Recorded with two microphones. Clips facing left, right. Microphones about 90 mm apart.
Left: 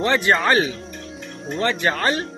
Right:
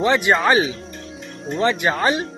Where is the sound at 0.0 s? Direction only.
15° right (ahead or behind).